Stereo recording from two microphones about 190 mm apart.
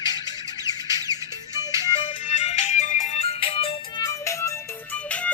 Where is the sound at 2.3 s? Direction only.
40° left (ahead or behind).